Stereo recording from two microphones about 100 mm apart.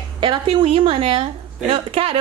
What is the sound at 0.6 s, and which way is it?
A woman's voice, 70° right (ahead or behind).